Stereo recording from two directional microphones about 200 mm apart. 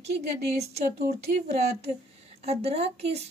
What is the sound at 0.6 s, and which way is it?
Speech, 35° right (ahead or behind).